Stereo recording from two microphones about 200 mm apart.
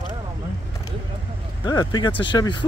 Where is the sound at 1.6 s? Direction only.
20° left (ahead or behind).